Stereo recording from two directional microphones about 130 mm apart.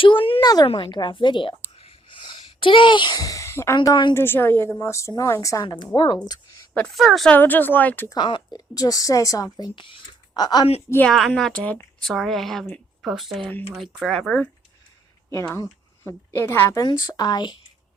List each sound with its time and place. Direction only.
0.0 s a sound: 40° left (ahead or behind)
0.4 s speech: 30° left (ahead or behind)
3.8 s speech: 35° left (ahead or behind)
4.1 s speech: 15° left (ahead or behind)
5.6 s speech: 35° left (ahead or behind)
6.7 s a woman's voice: 5° left (ahead or behind)
7.3 s a woman's voice: 15° left (ahead or behind)
8.1 s speech: 35° left (ahead or behind)
11.0 s a woman's voice: 5° left (ahead or behind)
16.0 s a woman's voice: 20° left (ahead or behind)
16.8 s speech: 30° left (ahead or behind)